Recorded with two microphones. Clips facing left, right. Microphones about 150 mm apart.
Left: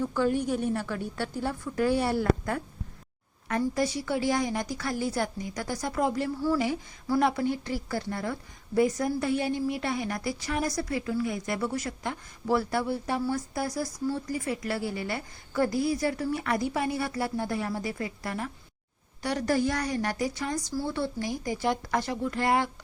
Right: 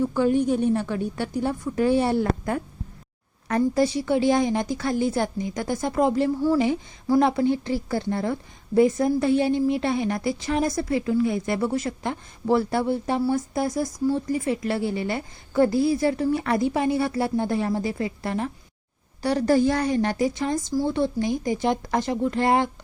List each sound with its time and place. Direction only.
0.0 s a woman's voice: 20° right (ahead or behind)